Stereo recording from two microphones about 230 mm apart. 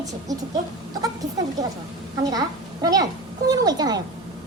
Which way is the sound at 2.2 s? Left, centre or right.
Centre.